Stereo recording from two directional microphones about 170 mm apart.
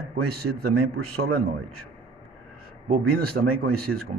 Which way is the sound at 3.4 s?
75° right (ahead or behind).